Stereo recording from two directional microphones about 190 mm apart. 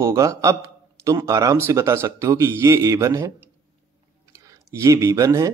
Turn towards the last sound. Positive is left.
turn(degrees=-15)  # may be behind; listen again after turning